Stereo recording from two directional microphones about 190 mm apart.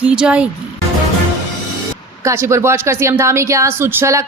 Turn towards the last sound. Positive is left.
turn(degrees=-15)  # may be behind; listen again after turning